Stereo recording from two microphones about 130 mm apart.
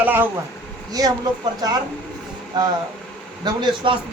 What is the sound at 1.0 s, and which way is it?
Speech, 30° right (ahead or behind).